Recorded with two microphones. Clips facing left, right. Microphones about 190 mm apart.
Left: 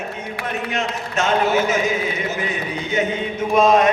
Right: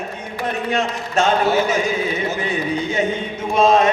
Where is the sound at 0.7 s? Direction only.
30° right (ahead or behind).